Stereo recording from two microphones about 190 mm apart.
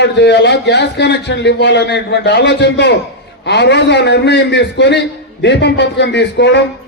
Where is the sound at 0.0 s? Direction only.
65° left (ahead or behind).